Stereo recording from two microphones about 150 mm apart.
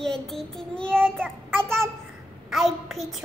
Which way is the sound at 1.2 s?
15° right (ahead or behind).